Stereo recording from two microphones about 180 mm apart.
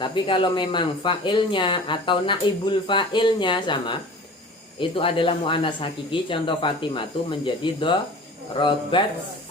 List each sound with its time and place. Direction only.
0.0 s speech: 25° left (ahead or behind)